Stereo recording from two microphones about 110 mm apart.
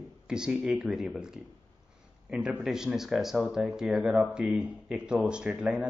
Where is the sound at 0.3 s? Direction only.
5° right (ahead or behind).